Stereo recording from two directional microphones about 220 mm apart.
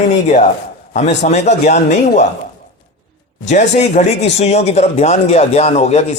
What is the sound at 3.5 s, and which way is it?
Speech, 30° left (ahead or behind).